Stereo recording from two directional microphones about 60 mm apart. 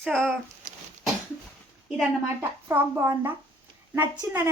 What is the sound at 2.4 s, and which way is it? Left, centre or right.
A woman's voice, right.